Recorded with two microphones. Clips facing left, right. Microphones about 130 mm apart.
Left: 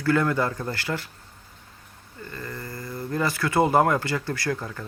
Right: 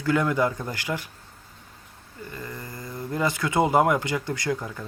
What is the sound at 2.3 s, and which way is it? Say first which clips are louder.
Speech: left 2 dB; 15° right (ahead or behind).